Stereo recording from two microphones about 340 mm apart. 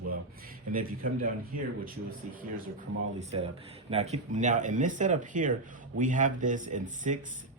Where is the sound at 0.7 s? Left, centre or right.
Right.